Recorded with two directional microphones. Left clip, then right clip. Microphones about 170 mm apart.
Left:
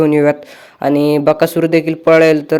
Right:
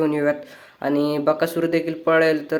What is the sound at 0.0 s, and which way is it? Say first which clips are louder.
A man's voice: left 9 dB; 45° left (ahead or behind).